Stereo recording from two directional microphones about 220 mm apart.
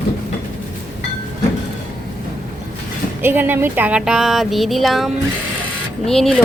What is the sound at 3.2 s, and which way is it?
Speech, 10° right (ahead or behind).